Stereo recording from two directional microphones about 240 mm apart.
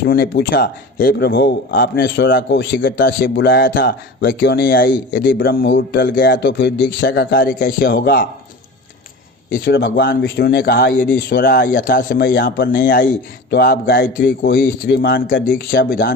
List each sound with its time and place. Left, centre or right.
0.0 s speech: left
9.5 s speech: left